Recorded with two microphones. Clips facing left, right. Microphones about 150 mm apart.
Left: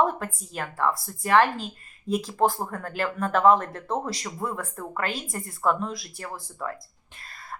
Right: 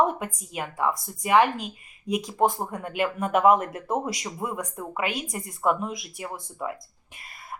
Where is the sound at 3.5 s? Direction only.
20° right (ahead or behind).